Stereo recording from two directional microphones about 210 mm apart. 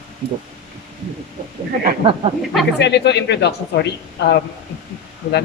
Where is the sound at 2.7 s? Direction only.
55° left (ahead or behind).